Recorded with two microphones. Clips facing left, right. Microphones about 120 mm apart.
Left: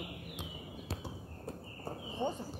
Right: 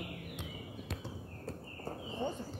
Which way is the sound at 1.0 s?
15° left (ahead or behind).